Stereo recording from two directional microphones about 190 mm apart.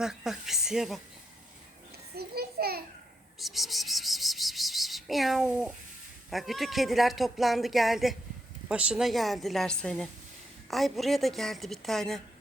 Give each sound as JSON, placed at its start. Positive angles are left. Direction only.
{"t": 0.0, "sound": "speech", "side_deg": 0}
{"t": 2.1, "sound": "a sound", "side_deg": -55}
{"t": 3.3, "sound": "wild animals", "side_deg": 0}
{"t": 6.3, "sound": "speech", "side_deg": 0}